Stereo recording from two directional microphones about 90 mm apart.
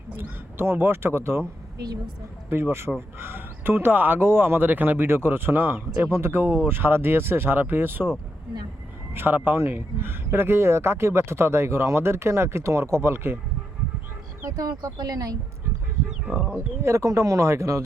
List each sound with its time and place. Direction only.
0.2 s speech: 25° right (ahead or behind)
2.5 s speech: 25° right (ahead or behind)
9.1 s speech: 20° right (ahead or behind)
14.4 s speech: 40° right (ahead or behind)
16.8 s speech: 35° right (ahead or behind)